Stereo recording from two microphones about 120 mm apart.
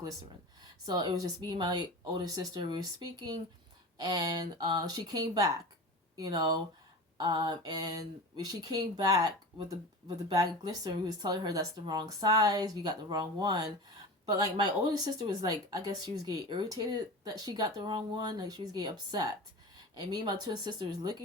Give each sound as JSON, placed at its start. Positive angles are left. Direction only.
{"t": 0.9, "sound": "speech", "side_deg": -35}
{"t": 10.3, "sound": "speech", "side_deg": -30}